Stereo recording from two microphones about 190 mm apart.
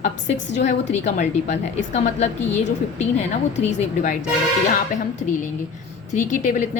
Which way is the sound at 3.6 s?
40° left (ahead or behind).